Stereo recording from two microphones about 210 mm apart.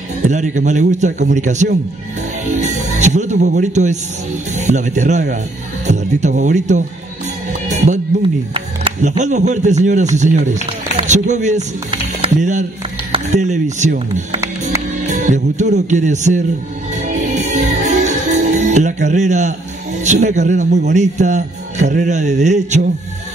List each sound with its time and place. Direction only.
0.3 s a man's voice: 35° right (ahead or behind)
7.6 s music: 35° right (ahead or behind)
8.5 s a man's voice: 30° right (ahead or behind)
15.0 s music: 35° right (ahead or behind)
15.7 s a man's voice: 35° right (ahead or behind)
16.9 s music: 35° right (ahead or behind)
20.0 s a man's voice: 35° right (ahead or behind)